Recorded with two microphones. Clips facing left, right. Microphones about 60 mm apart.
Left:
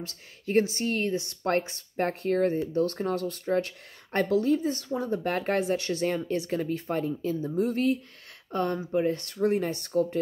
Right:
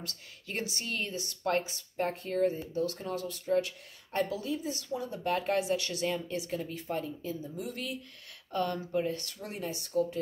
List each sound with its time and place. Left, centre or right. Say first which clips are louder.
0.5 s speech: left 11 dB; left
7.5 s speech: left 12 dB; left
9.0 s speech: left 10 dB; left